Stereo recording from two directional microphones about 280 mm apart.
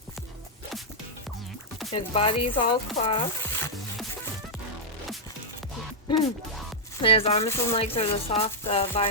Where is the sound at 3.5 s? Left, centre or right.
Centre.